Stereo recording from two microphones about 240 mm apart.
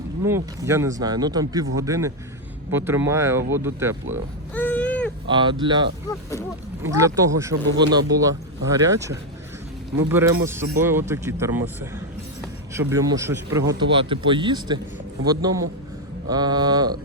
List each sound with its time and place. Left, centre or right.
0.3 s a man's voice: centre
4.5 s a sound: centre
5.3 s a man's voice: centre